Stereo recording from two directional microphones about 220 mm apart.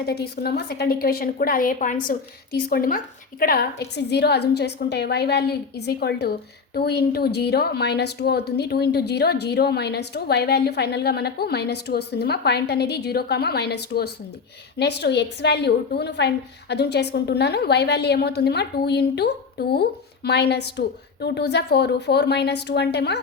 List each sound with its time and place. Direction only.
0.0 s a woman's voice: 45° left (ahead or behind)